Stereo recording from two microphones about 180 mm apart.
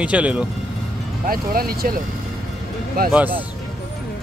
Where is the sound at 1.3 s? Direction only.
55° right (ahead or behind).